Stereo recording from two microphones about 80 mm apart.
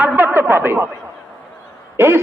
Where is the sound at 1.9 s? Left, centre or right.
Right.